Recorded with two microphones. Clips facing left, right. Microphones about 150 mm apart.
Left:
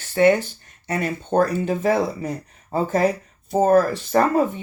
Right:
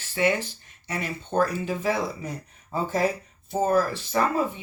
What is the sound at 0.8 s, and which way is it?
Speech, 50° left (ahead or behind).